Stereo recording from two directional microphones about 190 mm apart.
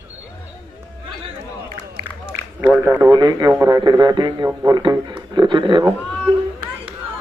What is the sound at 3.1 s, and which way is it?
Speech, 20° right (ahead or behind).